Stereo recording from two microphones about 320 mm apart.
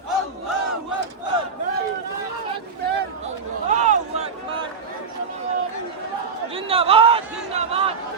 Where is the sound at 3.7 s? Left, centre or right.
Right.